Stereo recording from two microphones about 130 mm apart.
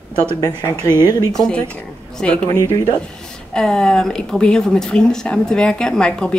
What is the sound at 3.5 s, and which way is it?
Speech, 5° left (ahead or behind).